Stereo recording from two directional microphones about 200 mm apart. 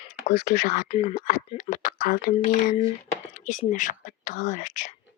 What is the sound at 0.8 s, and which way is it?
Speech, 30° left (ahead or behind).